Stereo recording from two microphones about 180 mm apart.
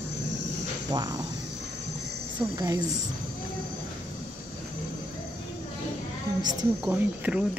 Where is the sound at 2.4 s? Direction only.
25° right (ahead or behind).